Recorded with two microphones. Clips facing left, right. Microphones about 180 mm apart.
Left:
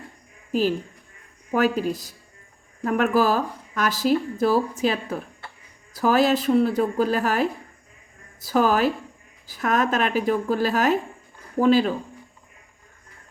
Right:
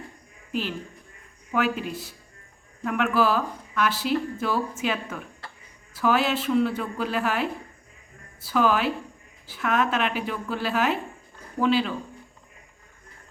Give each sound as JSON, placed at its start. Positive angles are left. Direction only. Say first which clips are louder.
{"t": 0.5, "sound": "speech", "louder": "left 7 dB", "side_deg": 40}